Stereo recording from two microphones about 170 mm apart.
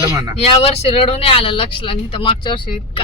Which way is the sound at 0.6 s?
35° left (ahead or behind).